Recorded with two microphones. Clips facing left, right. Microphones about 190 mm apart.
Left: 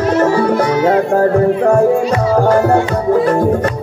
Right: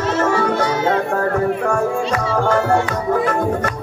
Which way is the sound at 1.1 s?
35° left (ahead or behind).